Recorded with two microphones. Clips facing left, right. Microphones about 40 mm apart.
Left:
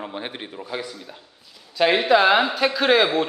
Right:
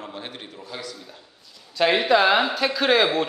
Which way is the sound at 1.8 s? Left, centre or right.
Centre.